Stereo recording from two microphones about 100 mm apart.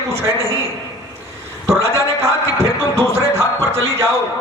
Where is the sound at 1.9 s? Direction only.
25° right (ahead or behind).